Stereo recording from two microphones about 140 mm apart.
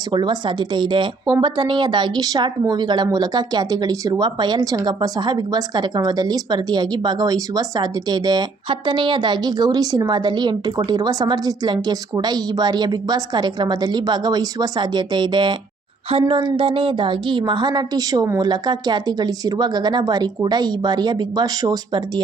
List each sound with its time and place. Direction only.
0.1 s a woman's voice: 35° right (ahead or behind)